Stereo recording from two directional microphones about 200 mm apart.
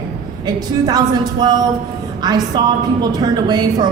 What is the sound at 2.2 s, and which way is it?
A woman's voice, 20° right (ahead or behind).